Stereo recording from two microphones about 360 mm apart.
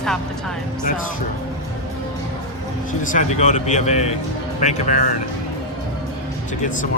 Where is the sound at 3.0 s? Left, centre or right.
Left.